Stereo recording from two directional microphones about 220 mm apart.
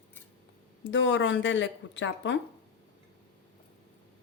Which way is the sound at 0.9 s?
55° left (ahead or behind).